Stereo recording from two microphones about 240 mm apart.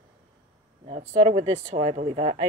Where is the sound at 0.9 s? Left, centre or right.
Right.